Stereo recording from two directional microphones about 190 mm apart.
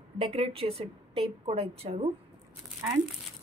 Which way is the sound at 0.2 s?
30° right (ahead or behind).